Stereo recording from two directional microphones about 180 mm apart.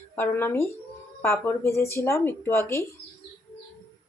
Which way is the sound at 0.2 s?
10° left (ahead or behind).